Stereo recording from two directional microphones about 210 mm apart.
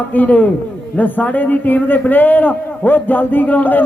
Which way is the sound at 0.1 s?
10° left (ahead or behind).